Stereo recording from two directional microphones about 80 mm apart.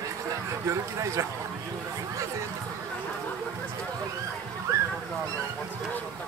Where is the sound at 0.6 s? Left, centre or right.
Right.